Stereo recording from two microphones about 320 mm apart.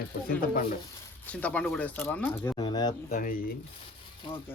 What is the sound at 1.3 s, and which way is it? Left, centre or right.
Speech, centre.